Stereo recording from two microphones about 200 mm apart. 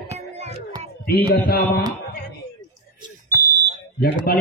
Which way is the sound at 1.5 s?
50° left (ahead or behind).